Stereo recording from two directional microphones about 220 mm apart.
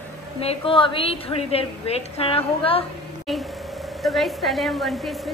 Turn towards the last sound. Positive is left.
turn(degrees=0)  # may be behind; listen again after turning